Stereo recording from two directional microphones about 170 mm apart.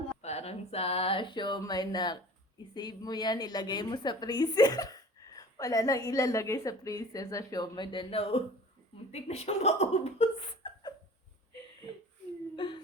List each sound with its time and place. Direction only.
0.2 s a woman's voice: 40° left (ahead or behind)
12.5 s whimper: 30° left (ahead or behind)